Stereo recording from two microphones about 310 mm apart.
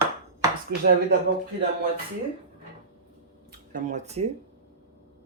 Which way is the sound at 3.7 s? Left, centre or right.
Right.